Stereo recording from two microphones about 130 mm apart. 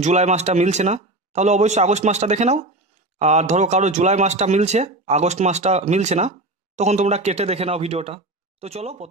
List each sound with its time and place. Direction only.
0.0 s speech: 60° right (ahead or behind)